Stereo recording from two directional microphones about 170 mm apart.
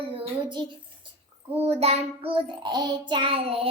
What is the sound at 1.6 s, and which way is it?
Child singing, 40° right (ahead or behind).